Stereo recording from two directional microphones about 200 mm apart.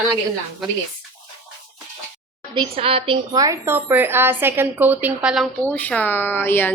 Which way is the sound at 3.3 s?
15° right (ahead or behind).